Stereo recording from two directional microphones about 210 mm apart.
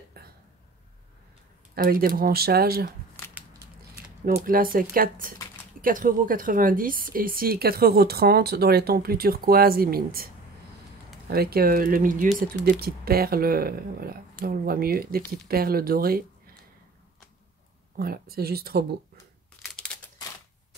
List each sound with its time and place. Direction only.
1.8 s speech: 45° right (ahead or behind)
4.5 s speech: 40° right (ahead or behind)
17.9 s speech: 45° right (ahead or behind)
19.6 s crumpling: 5° left (ahead or behind)